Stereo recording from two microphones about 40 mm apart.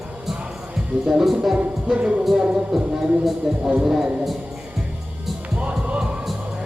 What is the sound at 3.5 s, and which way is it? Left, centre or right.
Speech, centre.